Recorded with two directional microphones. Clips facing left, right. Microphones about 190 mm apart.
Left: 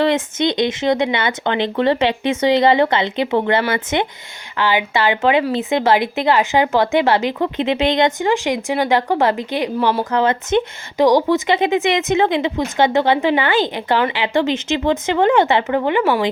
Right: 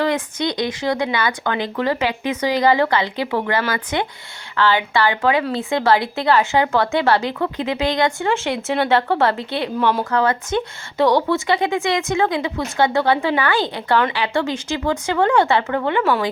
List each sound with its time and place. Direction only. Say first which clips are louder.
0.0 s speech: left 4 dB; 25° left (ahead or behind)